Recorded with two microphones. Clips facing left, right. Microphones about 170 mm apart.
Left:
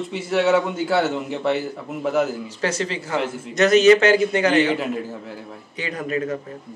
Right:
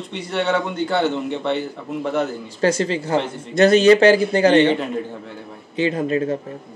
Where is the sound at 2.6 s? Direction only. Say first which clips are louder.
Right 7 dB; 30° right (ahead or behind).